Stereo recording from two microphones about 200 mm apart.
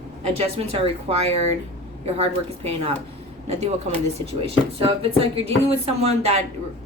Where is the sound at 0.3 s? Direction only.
30° right (ahead or behind).